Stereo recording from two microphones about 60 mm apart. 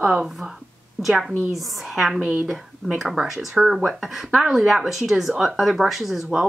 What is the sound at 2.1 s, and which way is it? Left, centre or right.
Speech, right.